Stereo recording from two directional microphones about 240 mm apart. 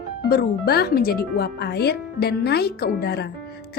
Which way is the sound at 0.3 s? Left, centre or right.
Left.